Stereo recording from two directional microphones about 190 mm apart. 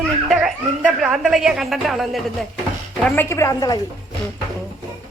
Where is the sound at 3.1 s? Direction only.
10° left (ahead or behind).